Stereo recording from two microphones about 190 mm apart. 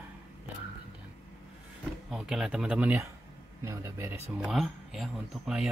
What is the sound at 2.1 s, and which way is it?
Speech, centre (ahead or behind).